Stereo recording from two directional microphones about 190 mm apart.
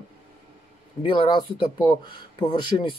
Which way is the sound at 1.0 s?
25° left (ahead or behind).